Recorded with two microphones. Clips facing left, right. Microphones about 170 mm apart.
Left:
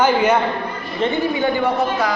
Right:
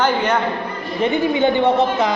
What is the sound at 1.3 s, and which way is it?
Speech, 25° right (ahead or behind).